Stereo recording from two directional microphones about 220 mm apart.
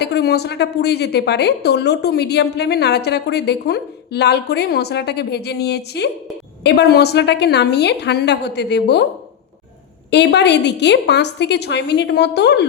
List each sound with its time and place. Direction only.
0.0 s a woman's voice: 50° left (ahead or behind)
10.1 s a woman's voice: 50° left (ahead or behind)